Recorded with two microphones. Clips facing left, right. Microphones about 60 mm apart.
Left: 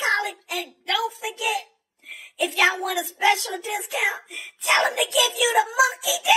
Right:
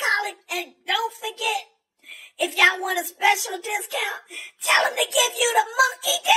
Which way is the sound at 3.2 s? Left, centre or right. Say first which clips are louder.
Even; centre.